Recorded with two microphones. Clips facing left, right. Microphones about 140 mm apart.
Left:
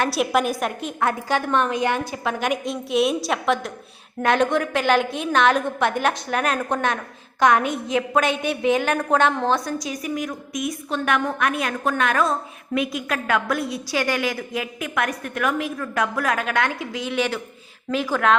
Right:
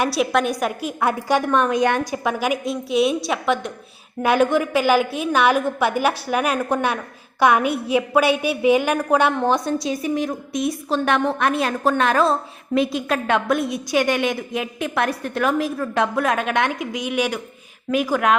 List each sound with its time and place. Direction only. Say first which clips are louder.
0.1 s a woman's voice: right 1 dB; centre (ahead or behind)
2.5 s a woman's voice: right 1 dB; centre (ahead or behind)
9.6 s a woman's voice: right 5 dB; 25° right (ahead or behind)